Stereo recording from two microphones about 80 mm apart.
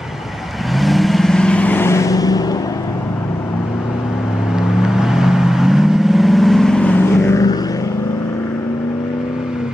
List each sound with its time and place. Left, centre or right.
0.7 s vehicle: centre
1.8 s vehicle: left
4.6 s vehicle: centre; by 7.3 s left